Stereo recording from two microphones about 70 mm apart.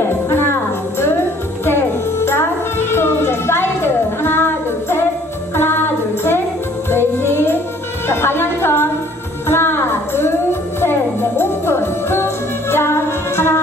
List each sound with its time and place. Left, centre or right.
0.0 s music: left